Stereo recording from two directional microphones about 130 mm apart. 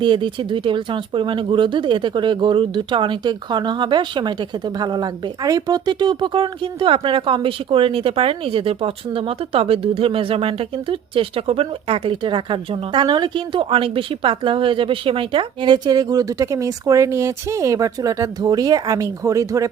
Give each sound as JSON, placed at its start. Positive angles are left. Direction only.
{"t": 0.0, "sound": "a woman's voice", "side_deg": -40}